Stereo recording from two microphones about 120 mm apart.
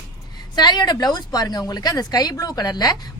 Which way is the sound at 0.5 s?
35° left (ahead or behind).